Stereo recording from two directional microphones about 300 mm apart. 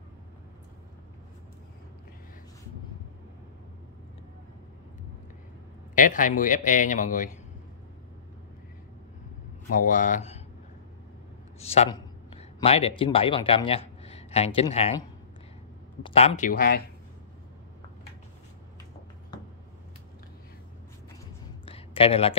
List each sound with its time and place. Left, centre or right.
5.9 s speech: left
9.8 s speech: left
11.6 s speech: left
21.6 s a sound: centre